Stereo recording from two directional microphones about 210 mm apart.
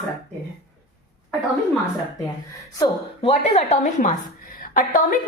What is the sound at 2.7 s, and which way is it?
A woman's voice, 25° left (ahead or behind).